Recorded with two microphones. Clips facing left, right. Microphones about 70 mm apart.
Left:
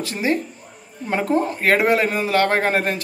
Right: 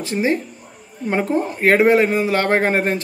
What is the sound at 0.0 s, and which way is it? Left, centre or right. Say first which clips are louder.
Speech: right 2 dB; right.